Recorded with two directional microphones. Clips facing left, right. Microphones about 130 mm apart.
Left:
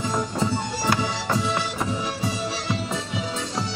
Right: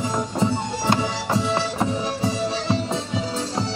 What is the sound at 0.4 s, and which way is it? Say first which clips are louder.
Music: right 2 dB; 25° right (ahead or behind).